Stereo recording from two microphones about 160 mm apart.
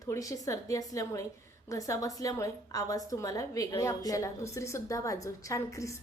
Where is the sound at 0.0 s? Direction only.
20° left (ahead or behind).